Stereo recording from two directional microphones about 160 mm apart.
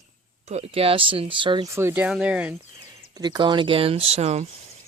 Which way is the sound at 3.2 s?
30° right (ahead or behind).